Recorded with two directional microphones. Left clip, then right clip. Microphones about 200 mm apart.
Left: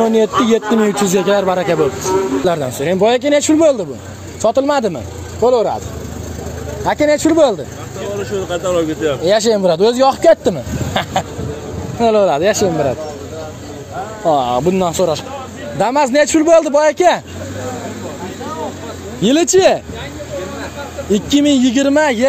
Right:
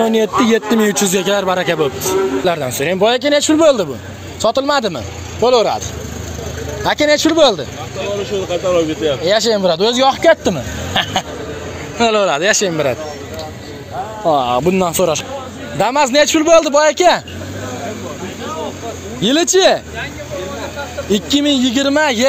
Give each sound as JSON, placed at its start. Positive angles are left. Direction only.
{"t": 0.0, "sound": "a man's voice", "side_deg": 5}
{"t": 5.4, "sound": "speech", "side_deg": 5}
{"t": 6.8, "sound": "speech", "side_deg": 5}
{"t": 9.0, "sound": "a man's voice", "side_deg": 25}
{"t": 10.9, "sound": "a man's voice", "side_deg": 10}
{"t": 12.5, "sound": "speech", "side_deg": -5}
{"t": 14.2, "sound": "speech", "side_deg": 10}
{"t": 15.8, "sound": "a man's voice", "side_deg": 10}
{"t": 19.2, "sound": "a man's voice", "side_deg": 20}
{"t": 21.1, "sound": "a man's voice", "side_deg": 20}